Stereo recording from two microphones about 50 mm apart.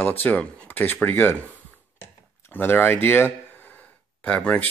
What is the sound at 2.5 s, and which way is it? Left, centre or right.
Speech, left.